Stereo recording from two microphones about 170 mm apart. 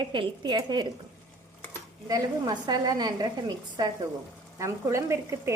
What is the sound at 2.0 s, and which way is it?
A woman's voice, 25° right (ahead or behind).